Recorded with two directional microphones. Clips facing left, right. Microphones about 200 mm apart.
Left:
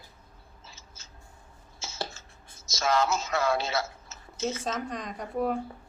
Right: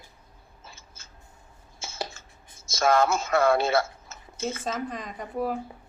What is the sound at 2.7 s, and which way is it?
Speech, 55° right (ahead or behind).